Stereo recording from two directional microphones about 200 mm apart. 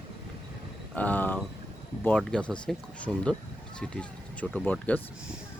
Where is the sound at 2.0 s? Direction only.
5° left (ahead or behind).